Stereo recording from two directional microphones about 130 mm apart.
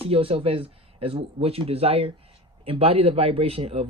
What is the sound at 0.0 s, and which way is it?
A man's voice, 45° right (ahead or behind).